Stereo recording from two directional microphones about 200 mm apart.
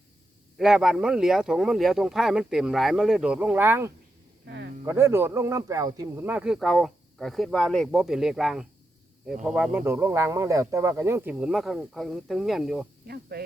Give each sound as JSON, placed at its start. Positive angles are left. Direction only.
{"t": 0.5, "sound": "speech", "side_deg": -5}
{"t": 4.4, "sound": "a sound", "side_deg": -60}
{"t": 4.9, "sound": "speech", "side_deg": -10}
{"t": 9.8, "sound": "speech", "side_deg": -10}
{"t": 13.1, "sound": "speech", "side_deg": -50}